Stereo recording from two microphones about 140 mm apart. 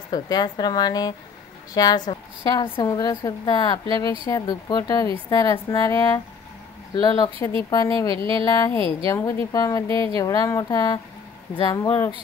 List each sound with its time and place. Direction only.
0.1 s speech: 30° left (ahead or behind)